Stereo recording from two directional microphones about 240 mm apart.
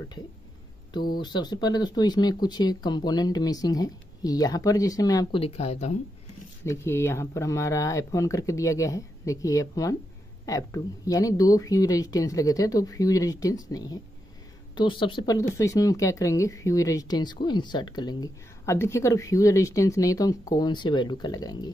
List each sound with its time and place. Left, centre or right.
1.2 s speech: centre
6.6 s speech: centre